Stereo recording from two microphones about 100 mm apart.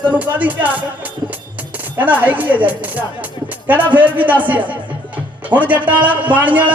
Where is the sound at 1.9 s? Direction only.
15° right (ahead or behind).